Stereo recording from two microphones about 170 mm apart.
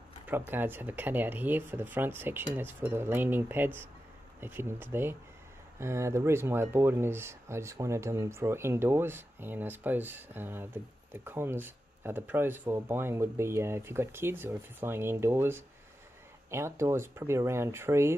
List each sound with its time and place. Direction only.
0.3 s speech: 10° right (ahead or behind)